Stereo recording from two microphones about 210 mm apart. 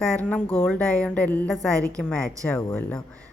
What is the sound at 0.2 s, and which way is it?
A woman's voice, 5° left (ahead or behind).